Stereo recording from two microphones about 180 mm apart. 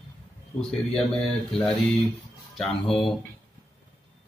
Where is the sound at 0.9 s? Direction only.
5° left (ahead or behind).